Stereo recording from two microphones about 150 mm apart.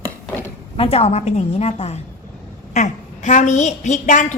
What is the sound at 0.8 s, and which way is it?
A woman's voice, 45° left (ahead or behind).